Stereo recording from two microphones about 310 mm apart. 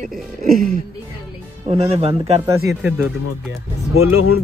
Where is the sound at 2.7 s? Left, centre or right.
Centre.